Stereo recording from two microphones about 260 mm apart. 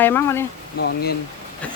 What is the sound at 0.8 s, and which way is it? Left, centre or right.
Speech, left.